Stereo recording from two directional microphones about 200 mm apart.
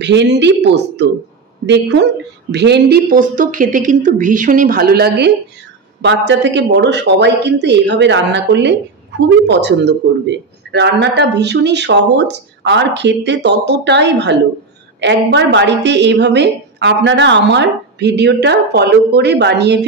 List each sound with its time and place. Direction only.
0.0 s a woman's voice: 60° right (ahead or behind)